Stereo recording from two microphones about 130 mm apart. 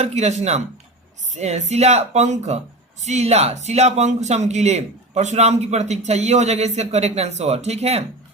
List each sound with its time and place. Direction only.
0.0 s a man's voice: 55° right (ahead or behind)